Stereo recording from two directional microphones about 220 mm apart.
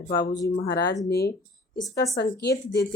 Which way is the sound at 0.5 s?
50° left (ahead or behind).